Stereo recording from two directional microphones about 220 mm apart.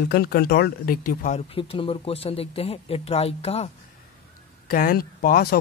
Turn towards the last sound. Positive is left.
turn(degrees=40)  # may be behind; listen again after turning